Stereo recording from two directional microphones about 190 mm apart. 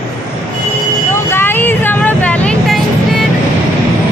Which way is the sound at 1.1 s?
10° left (ahead or behind).